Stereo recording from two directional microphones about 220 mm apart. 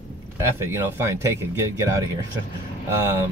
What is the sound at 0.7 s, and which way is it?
Speech, 10° right (ahead or behind).